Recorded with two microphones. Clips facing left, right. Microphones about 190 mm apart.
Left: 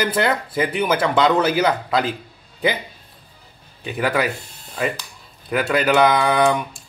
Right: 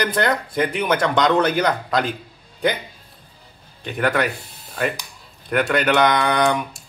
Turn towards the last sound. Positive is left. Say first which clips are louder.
# left 2 dB
turn(degrees=0)  # may be behind; listen again after turning